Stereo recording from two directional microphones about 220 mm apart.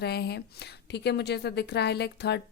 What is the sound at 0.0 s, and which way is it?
A woman's voice, 45° left (ahead or behind).